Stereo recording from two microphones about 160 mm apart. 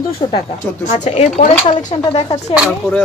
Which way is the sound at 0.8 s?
45° left (ahead or behind).